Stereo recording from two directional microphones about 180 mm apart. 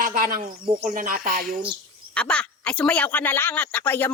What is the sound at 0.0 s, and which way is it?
Speech, 55° right (ahead or behind).